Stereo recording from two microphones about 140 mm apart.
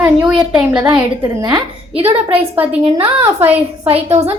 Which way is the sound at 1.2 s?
20° right (ahead or behind).